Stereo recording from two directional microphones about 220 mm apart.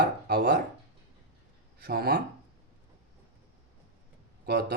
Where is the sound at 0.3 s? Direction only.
45° right (ahead or behind).